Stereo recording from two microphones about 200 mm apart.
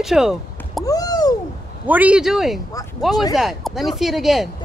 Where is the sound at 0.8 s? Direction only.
20° left (ahead or behind).